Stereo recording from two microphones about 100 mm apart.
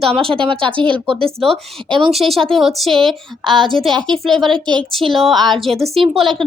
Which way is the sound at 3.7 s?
5° left (ahead or behind).